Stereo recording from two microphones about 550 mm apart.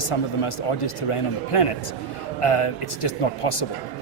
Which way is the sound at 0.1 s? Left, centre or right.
Left.